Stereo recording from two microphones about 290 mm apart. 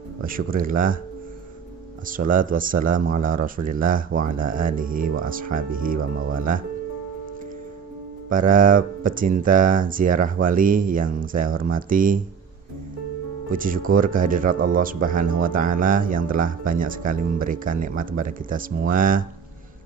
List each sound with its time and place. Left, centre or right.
0.2 s speech: right
2.0 s speech: right
6.0 s speech: right
6.3 s speech: right
8.3 s speech: right
13.5 s speech: right